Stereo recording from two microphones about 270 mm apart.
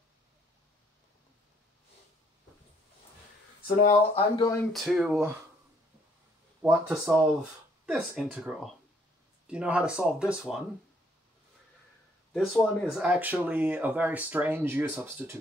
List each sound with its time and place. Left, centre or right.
3.6 s speech: left
4.4 s speech: centre
4.7 s speech: centre
6.6 s speech: centre
12.3 s speech: centre